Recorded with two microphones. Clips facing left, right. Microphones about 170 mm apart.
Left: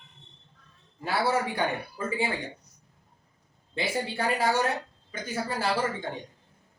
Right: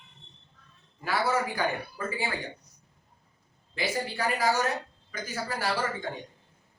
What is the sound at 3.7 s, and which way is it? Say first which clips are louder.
Speech: left 1 dB; 25° left (ahead or behind).